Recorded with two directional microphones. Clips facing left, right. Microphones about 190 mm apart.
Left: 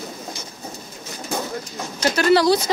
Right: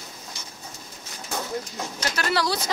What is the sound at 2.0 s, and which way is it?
Bird, 20° left (ahead or behind).